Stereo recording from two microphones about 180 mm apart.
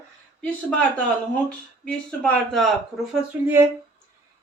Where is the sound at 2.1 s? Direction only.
5° left (ahead or behind).